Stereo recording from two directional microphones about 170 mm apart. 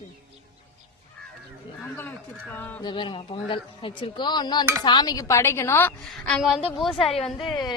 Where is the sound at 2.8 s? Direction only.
30° left (ahead or behind); by 7.5 s centre (ahead or behind).